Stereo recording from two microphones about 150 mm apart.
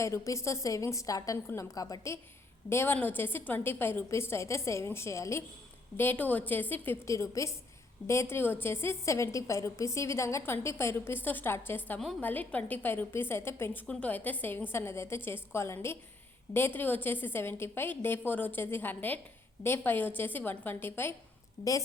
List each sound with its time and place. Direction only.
0.0 s a woman's voice: 20° left (ahead or behind)